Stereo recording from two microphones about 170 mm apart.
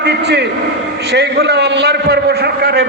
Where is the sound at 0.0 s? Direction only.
80° right.